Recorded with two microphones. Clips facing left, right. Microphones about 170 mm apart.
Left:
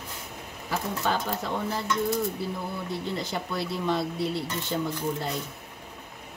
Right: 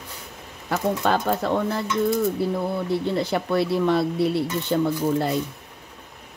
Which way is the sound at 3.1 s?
65° right (ahead or behind).